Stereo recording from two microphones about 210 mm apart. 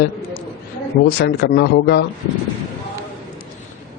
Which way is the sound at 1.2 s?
55° left (ahead or behind).